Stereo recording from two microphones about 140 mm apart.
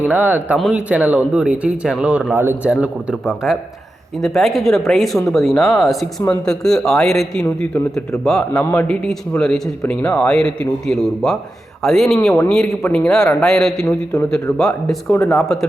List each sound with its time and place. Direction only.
0.0 s speech: 10° right (ahead or behind)
2.8 s a man's voice: 5° right (ahead or behind)
15.1 s speech: 15° left (ahead or behind)